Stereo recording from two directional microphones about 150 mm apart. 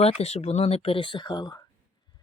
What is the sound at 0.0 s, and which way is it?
Speech, 45° left (ahead or behind).